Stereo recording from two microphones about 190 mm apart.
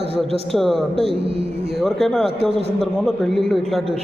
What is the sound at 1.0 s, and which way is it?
Speech, 30° right (ahead or behind).